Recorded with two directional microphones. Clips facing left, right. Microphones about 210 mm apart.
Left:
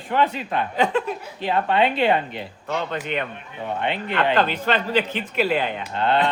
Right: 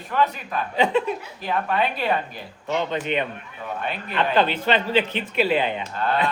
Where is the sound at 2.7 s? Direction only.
15° right (ahead or behind).